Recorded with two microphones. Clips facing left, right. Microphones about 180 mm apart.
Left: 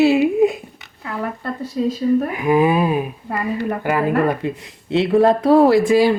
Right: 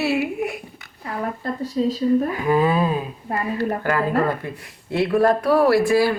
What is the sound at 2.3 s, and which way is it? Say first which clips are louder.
Speech: left 3 dB; 15° left (ahead or behind).